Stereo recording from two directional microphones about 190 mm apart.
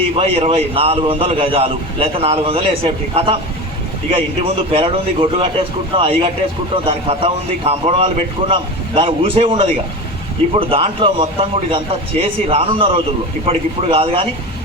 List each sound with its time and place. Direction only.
0.2 s a man's voice: 30° right (ahead or behind)
4.4 s a man's voice: 30° right (ahead or behind)